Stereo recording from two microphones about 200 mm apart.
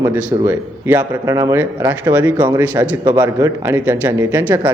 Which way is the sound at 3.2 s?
10° right (ahead or behind).